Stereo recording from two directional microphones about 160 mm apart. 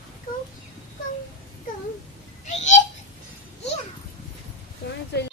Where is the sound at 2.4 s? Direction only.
50° left (ahead or behind).